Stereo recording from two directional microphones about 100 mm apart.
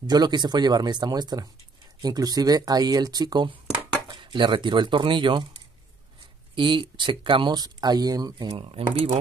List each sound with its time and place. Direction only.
0.0 s speech: 45° right (ahead or behind)
4.1 s speech: 55° right (ahead or behind)
6.5 s speech: 55° right (ahead or behind)
8.5 s speech: 70° right (ahead or behind)